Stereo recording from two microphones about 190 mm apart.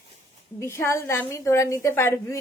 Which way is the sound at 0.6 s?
15° left (ahead or behind).